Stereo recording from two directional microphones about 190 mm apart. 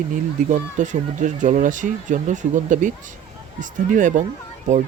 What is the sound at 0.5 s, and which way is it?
Speech, 40° right (ahead or behind).